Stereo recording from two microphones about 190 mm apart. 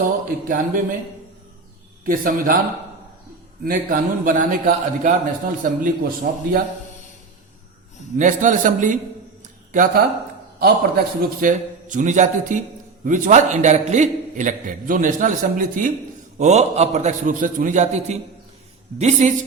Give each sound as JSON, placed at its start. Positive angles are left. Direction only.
{"t": 0.0, "sound": "a man's voice", "side_deg": -45}
{"t": 2.0, "sound": "a man's voice", "side_deg": -45}
{"t": 3.6, "sound": "a man's voice", "side_deg": -50}
{"t": 8.2, "sound": "a man's voice", "side_deg": -40}